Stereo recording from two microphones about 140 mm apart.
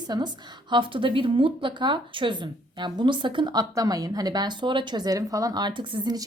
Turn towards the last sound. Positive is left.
turn(degrees=-30)  # may be behind; listen again after turning